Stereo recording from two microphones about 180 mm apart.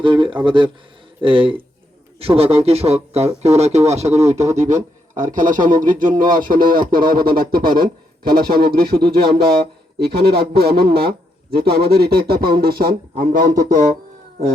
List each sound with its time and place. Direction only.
0.0 s speech: 25° right (ahead or behind); by 13.8 s 55° right (ahead or behind)